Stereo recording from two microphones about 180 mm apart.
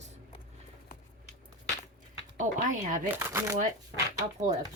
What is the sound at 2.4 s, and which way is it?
Speech, 45° right (ahead or behind).